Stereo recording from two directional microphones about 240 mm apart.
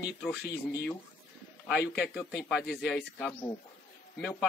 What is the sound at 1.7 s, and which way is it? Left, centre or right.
A man's voice, centre.